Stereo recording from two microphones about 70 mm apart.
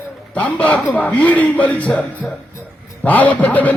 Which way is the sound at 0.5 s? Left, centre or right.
Left.